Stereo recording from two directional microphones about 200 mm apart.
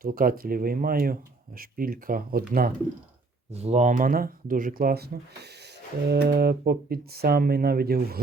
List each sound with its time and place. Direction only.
0.0 s speech: 45° right (ahead or behind)
3.5 s speech: 35° right (ahead or behind); by 8.2 s 50° right (ahead or behind)